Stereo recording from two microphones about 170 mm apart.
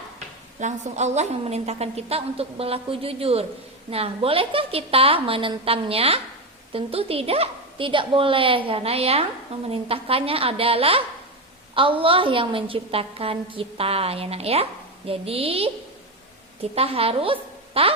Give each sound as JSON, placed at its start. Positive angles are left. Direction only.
{"t": 0.6, "sound": "a woman's voice", "side_deg": -40}
{"t": 16.7, "sound": "a woman's voice", "side_deg": -35}